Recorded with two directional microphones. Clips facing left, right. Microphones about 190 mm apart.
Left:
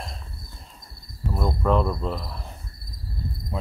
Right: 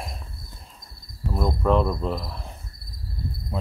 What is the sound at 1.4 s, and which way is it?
Speech, centre (ahead or behind).